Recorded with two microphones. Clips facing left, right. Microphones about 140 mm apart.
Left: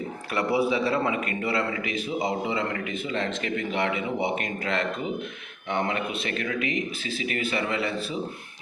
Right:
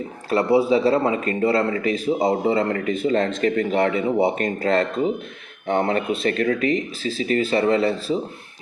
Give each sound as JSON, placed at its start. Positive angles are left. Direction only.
{"t": 0.3, "sound": "a man's voice", "side_deg": -30}